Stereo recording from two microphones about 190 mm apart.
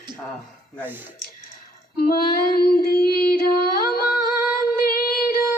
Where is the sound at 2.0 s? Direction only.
50° left (ahead or behind).